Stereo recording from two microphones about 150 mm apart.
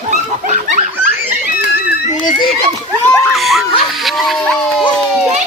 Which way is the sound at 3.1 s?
Centre (ahead or behind).